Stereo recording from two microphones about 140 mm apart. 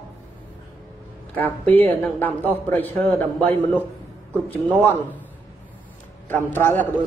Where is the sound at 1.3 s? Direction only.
10° left (ahead or behind).